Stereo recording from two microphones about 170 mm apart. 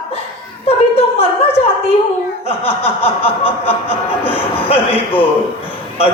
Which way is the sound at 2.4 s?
35° left (ahead or behind).